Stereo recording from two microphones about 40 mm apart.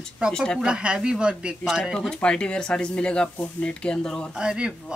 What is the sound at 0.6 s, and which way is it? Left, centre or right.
A woman's voice, right.